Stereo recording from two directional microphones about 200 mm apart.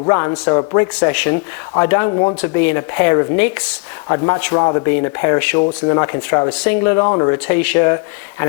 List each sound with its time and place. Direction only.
0.0 s speech: 20° left (ahead or behind)
7.3 s speech: 10° left (ahead or behind)